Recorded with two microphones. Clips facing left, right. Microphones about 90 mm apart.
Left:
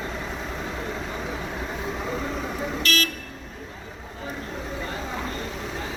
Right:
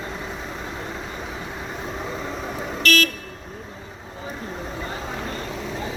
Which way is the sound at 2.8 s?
45° right (ahead or behind).